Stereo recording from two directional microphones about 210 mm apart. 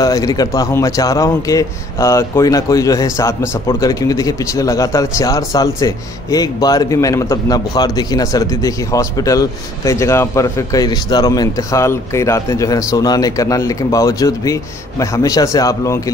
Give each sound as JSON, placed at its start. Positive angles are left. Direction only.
{"t": 0.0, "sound": "speech", "side_deg": 15}